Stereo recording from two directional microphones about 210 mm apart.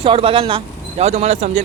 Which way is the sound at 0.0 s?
25° right (ahead or behind).